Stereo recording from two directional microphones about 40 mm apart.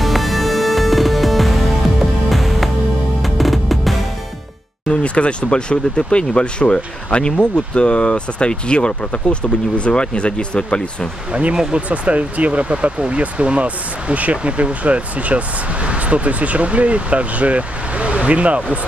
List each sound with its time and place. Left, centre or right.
0.0 s music: centre
4.8 s speech: left
11.5 s speech: centre
11.9 s speech: right